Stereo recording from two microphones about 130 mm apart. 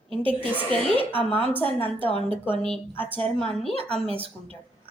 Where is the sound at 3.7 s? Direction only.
50° right (ahead or behind).